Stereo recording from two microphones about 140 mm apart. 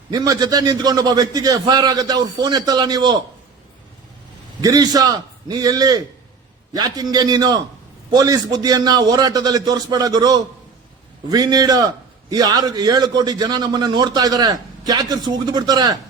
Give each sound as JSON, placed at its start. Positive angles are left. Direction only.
{"t": 0.1, "sound": "a man's voice", "side_deg": -25}
{"t": 4.6, "sound": "a man's voice", "side_deg": -30}